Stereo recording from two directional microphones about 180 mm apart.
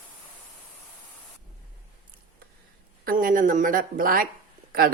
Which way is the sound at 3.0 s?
50° right (ahead or behind).